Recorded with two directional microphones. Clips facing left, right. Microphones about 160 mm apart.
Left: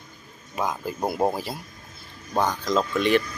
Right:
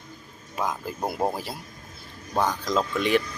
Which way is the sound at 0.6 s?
Centre (ahead or behind).